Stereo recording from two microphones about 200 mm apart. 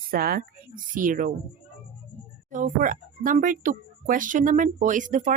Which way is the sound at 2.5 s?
40° right (ahead or behind).